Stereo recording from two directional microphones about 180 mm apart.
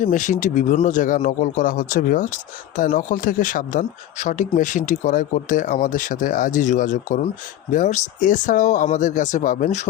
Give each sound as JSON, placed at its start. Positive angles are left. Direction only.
{"t": 0.0, "sound": "speech", "side_deg": 45}